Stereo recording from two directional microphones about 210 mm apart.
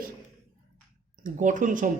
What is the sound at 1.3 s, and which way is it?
Speech, 35° right (ahead or behind).